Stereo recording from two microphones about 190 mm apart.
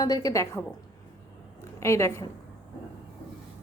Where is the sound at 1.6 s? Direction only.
15° left (ahead or behind).